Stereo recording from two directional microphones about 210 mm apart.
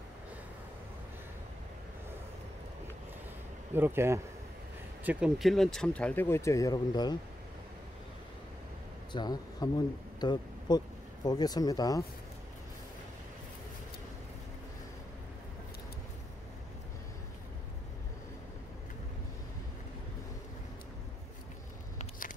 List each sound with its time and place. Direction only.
3.7 s speech: 10° right (ahead or behind); by 7.2 s 20° left (ahead or behind)
9.1 s speech: 20° left (ahead or behind)